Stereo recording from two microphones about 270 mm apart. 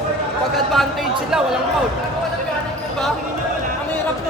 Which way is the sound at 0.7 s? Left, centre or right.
Centre.